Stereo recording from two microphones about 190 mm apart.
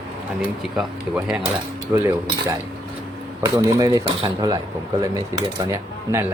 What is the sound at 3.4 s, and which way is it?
Speech, 20° right (ahead or behind).